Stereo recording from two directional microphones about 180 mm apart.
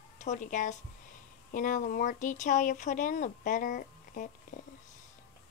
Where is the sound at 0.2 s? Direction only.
45° left (ahead or behind).